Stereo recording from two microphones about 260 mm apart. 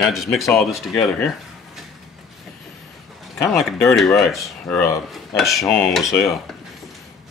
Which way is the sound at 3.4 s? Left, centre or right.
Centre.